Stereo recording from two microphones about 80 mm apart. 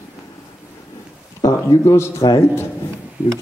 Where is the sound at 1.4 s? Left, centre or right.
Left.